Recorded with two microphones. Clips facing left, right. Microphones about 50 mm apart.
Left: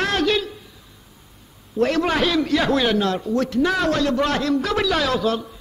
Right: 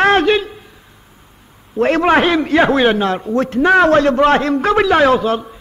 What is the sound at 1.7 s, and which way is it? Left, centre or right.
A man's voice, right.